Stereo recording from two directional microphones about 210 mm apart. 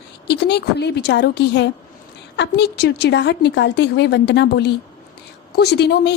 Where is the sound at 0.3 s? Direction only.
55° left (ahead or behind).